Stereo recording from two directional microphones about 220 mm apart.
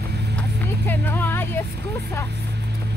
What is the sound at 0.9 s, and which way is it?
Music, 10° left (ahead or behind).